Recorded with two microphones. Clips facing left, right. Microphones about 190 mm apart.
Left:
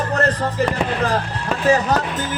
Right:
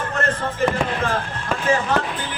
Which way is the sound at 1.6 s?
40° left (ahead or behind).